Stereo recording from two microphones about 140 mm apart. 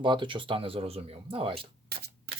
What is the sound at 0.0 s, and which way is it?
Speech, 35° right (ahead or behind).